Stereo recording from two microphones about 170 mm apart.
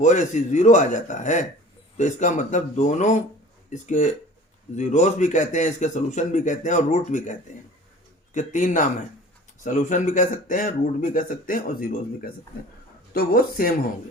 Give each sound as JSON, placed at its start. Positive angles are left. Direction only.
{"t": 0.0, "sound": "a man's voice", "side_deg": 45}